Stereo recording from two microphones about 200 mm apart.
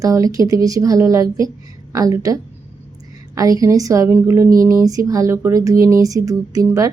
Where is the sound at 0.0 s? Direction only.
15° right (ahead or behind).